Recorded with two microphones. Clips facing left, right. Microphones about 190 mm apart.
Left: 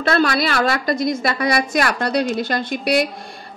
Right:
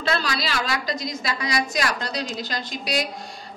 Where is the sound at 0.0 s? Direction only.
55° left (ahead or behind).